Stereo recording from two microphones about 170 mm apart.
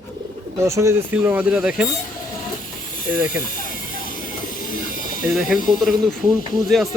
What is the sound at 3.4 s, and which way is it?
Hiss, 50° left (ahead or behind).